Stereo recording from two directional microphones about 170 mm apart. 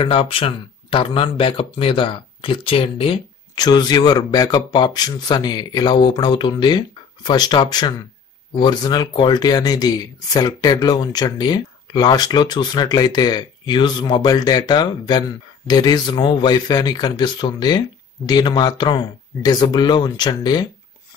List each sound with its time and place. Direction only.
0.0 s speech: 30° left (ahead or behind)